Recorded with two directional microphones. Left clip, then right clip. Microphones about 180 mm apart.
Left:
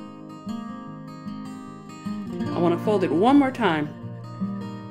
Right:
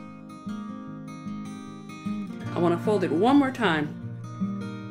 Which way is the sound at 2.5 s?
10° left (ahead or behind).